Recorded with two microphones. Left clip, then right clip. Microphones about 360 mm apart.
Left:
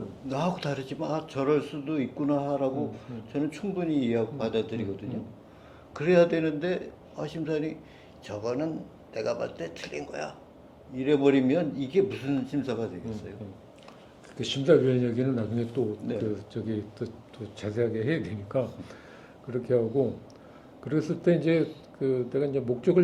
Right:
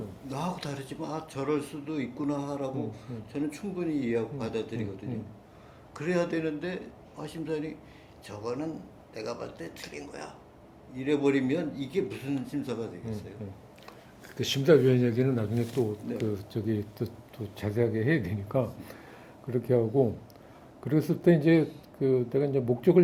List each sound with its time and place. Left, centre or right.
0.3 s speech: left
5.9 s speech: left
14.3 s speech: right
16.3 s speech: right
20.8 s speech: right